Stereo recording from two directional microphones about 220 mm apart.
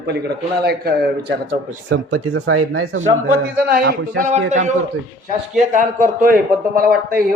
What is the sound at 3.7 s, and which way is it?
Speech, 45° right (ahead or behind).